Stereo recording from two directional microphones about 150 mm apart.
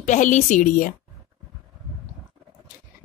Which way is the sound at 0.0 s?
55° left (ahead or behind).